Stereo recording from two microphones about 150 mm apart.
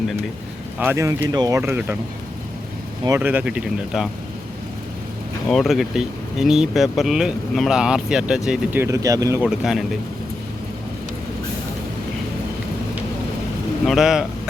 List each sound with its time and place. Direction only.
0.8 s speech: 15° right (ahead or behind)
3.1 s speech: 15° right (ahead or behind)
5.5 s speech: centre (ahead or behind)
8.8 s speech: 20° right (ahead or behind)
9.4 s speech: 5° right (ahead or behind)
13.8 s speech: centre (ahead or behind)